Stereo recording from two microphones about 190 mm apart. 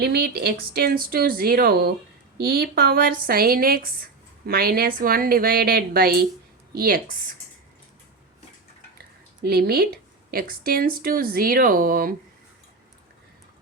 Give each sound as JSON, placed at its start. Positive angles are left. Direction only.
{"t": 0.0, "sound": "speech", "side_deg": -60}
{"t": 9.4, "sound": "speech", "side_deg": -55}